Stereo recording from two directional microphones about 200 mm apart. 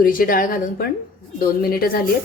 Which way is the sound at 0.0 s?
45° left (ahead or behind).